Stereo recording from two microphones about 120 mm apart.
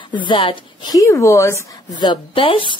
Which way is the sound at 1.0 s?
25° left (ahead or behind).